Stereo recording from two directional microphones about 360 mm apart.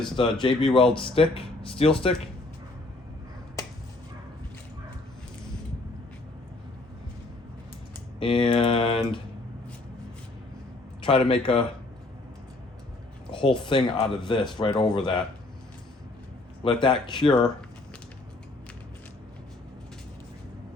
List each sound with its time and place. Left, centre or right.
0.2 s speech: centre
8.2 s speech: centre
11.0 s speech: centre
13.3 s speech: centre
16.8 s speech: centre
17.2 s speech: centre